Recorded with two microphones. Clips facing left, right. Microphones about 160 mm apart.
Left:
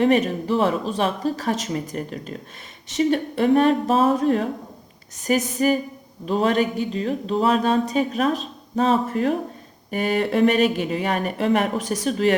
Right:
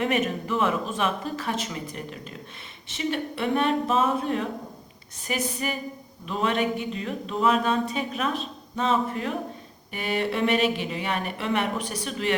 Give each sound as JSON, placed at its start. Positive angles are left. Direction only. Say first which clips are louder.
{"t": 0.0, "sound": "speech", "louder": "left 7 dB", "side_deg": 35}